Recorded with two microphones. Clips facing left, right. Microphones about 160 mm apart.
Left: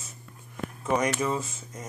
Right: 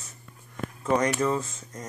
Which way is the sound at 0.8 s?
10° left (ahead or behind).